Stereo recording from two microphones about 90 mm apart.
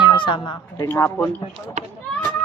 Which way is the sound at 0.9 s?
30° left (ahead or behind).